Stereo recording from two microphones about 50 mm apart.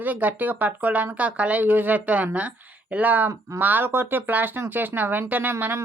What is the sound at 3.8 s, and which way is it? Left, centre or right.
Speech, right.